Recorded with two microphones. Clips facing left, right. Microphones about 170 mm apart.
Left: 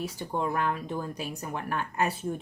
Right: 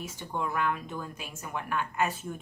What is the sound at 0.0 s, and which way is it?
Speech, 35° left (ahead or behind).